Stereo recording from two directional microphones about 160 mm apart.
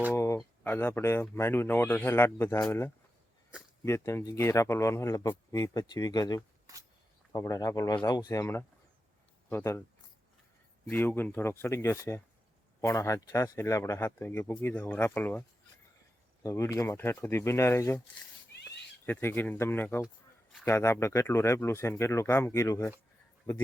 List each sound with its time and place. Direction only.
0.6 s speech: 10° left (ahead or behind)
10.8 s speech: 10° left (ahead or behind)